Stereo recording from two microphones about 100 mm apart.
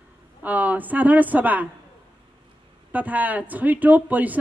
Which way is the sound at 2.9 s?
15° right (ahead or behind).